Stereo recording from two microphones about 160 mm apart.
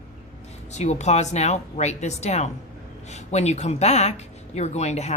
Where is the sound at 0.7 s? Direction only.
45° left (ahead or behind).